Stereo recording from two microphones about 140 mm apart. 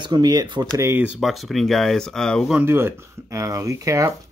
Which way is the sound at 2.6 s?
15° right (ahead or behind).